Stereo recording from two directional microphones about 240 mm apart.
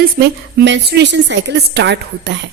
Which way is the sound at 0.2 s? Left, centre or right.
Right.